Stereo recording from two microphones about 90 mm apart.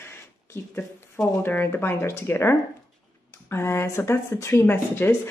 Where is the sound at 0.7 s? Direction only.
15° left (ahead or behind).